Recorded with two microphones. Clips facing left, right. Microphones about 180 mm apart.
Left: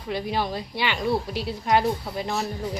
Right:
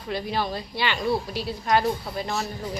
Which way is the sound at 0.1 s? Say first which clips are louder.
Left 1 dB; 15° left (ahead or behind).